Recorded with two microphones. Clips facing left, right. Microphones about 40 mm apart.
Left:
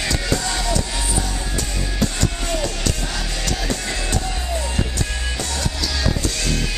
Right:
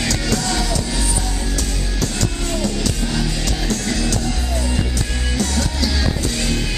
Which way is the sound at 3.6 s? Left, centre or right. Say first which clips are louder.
Right 3 dB; left.